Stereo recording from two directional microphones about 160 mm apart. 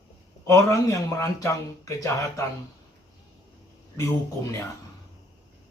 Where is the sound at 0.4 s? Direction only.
20° left (ahead or behind).